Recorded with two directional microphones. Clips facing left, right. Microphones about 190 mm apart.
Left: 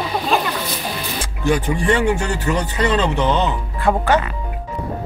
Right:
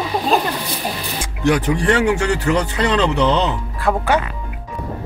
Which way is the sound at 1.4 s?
80° right.